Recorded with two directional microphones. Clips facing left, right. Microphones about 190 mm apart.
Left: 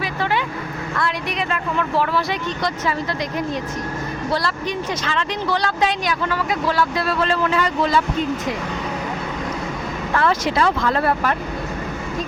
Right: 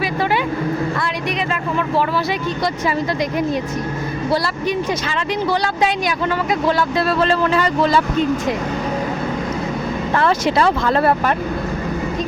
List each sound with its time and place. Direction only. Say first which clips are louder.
5.0 s speech: right 3 dB; 10° right (ahead or behind); by 8.0 s 35° right (ahead or behind)
10.6 s speech: right 3 dB; 30° right (ahead or behind)